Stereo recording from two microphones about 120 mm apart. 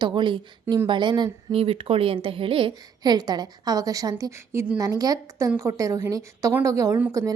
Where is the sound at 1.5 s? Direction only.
50° right (ahead or behind).